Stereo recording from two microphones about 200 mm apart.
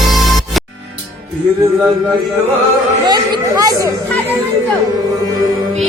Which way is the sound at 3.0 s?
20° right (ahead or behind).